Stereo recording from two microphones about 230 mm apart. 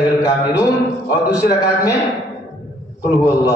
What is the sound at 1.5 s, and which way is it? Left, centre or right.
Speech, centre.